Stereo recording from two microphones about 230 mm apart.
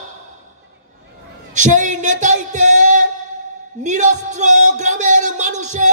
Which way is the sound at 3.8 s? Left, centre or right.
Right.